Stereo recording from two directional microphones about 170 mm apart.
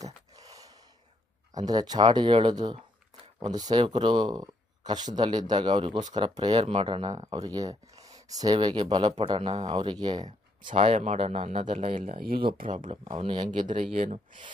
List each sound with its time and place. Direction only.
0.0 s a sound: 20° right (ahead or behind)
1.5 s speech: 25° right (ahead or behind)
6.6 s speech: 40° right (ahead or behind)
13.1 s speech: 30° right (ahead or behind)
13.6 s speech: 50° right (ahead or behind)